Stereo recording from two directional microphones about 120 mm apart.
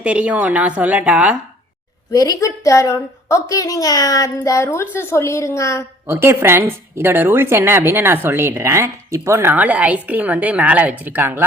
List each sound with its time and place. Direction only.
0.0 s a woman's voice: 10° right (ahead or behind)
2.1 s a woman's voice: 30° left (ahead or behind)
6.1 s a woman's voice: 20° right (ahead or behind)